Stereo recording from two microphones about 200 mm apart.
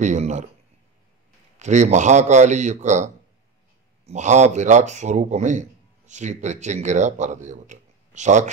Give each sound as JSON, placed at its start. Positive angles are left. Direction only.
{"t": 0.0, "sound": "speech", "side_deg": -35}
{"t": 1.6, "sound": "speech", "side_deg": -35}